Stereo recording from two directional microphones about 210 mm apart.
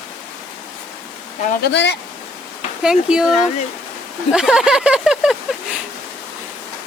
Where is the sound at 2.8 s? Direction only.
5° right (ahead or behind).